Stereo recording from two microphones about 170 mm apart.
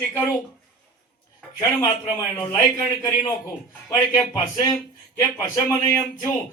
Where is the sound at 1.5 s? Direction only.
20° left (ahead or behind).